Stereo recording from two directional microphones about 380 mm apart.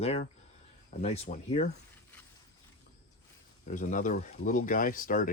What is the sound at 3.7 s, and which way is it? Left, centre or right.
Speech, centre.